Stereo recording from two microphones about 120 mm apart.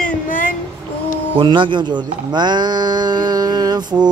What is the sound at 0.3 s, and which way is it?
Music, 90° left.